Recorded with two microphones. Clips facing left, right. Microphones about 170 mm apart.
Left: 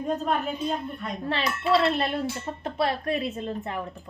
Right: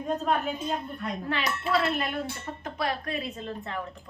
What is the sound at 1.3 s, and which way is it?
A woman's voice, 30° left (ahead or behind).